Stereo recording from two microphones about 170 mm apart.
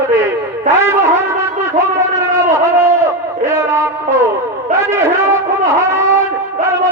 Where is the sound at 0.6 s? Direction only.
15° right (ahead or behind).